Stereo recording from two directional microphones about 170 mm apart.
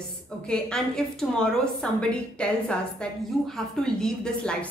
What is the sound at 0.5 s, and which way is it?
A woman's voice, 5° left (ahead or behind).